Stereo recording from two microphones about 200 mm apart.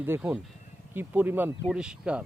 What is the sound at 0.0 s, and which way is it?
Speech, 10° right (ahead or behind).